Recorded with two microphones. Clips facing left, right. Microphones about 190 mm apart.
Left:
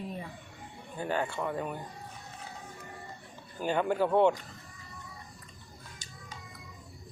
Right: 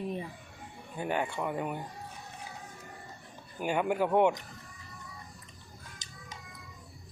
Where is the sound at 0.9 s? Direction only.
15° right (ahead or behind).